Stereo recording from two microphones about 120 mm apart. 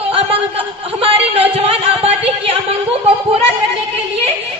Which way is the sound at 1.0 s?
50° right (ahead or behind).